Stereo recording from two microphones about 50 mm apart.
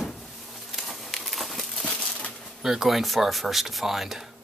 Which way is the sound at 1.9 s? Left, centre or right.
Left.